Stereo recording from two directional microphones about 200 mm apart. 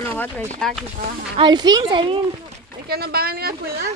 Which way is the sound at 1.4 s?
20° right (ahead or behind).